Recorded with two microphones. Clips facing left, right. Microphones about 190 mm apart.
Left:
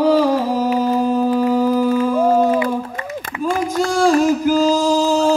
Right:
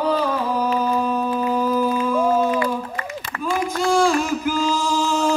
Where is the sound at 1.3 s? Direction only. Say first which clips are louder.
Left 5 dB; 75° left (ahead or behind).